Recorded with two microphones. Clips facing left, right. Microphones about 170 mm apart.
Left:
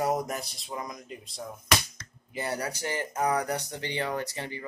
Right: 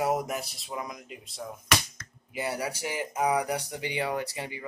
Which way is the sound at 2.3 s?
5° right (ahead or behind).